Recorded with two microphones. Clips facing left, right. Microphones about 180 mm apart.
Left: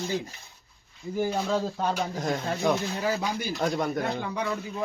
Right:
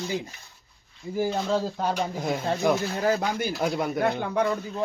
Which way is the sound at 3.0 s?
50° right (ahead or behind).